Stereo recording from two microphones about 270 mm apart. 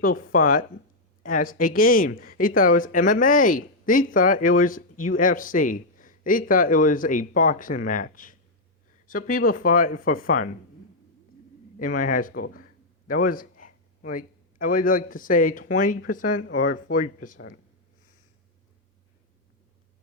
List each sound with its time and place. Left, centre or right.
0.3 s speech: left
11.8 s a man's voice: left
16.4 s speech: left
16.6 s speech: left